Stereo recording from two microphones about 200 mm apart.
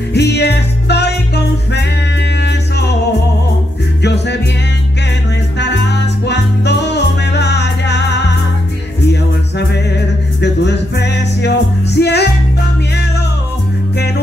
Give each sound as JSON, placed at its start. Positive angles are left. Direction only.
{"t": 0.1, "sound": "music", "side_deg": 55}
{"t": 4.0, "sound": "music", "side_deg": 60}
{"t": 5.6, "sound": "music", "side_deg": 60}
{"t": 13.9, "sound": "music", "side_deg": 55}